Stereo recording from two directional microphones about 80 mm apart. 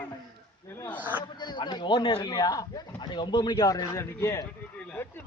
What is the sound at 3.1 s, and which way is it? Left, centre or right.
A man's voice, left.